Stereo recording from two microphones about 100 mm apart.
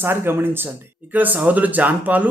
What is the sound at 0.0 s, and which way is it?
A woman's voice, 20° right (ahead or behind).